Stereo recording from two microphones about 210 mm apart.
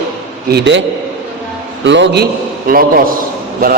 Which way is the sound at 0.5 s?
55° right (ahead or behind).